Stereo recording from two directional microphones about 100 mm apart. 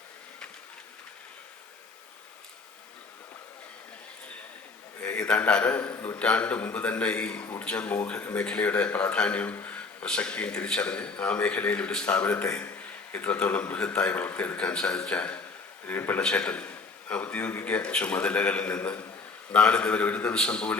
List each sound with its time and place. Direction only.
4.9 s a man's voice: 15° left (ahead or behind)